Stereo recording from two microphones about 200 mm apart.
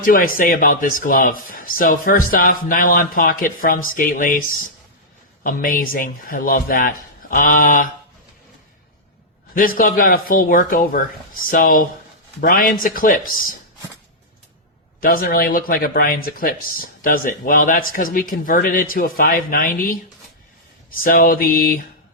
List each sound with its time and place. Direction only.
0.0 s speech: 45° left (ahead or behind)
5.4 s speech: 45° left (ahead or behind)
9.6 s speech: 45° left (ahead or behind)
15.0 s speech: 45° left (ahead or behind)
21.0 s speech: 45° left (ahead or behind)